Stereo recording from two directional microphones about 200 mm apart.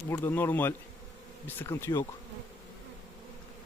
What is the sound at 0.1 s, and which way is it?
Speech, 10° left (ahead or behind).